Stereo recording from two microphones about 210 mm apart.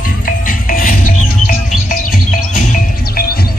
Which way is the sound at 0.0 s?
40° left (ahead or behind).